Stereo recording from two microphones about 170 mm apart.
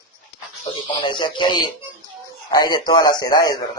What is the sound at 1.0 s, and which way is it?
A man's voice, 25° left (ahead or behind).